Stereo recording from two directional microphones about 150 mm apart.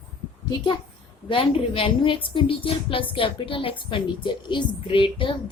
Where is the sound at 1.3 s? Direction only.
35° left (ahead or behind).